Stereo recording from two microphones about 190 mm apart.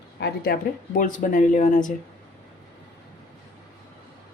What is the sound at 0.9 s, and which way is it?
Speech, 45° left (ahead or behind).